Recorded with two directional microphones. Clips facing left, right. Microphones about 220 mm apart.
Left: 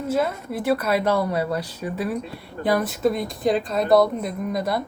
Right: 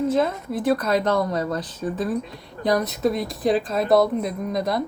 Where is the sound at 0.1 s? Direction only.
5° left (ahead or behind).